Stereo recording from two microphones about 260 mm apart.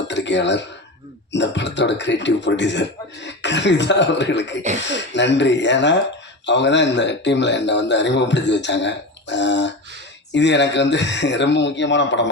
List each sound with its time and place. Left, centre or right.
0.1 s chink: left
1.3 s speech: left